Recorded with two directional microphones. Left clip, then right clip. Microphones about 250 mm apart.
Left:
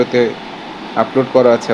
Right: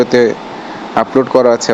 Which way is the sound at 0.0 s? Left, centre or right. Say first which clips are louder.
Right 4 dB; right.